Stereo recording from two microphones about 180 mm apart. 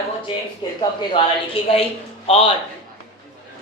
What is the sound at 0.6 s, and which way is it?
A man's voice, 25° left (ahead or behind).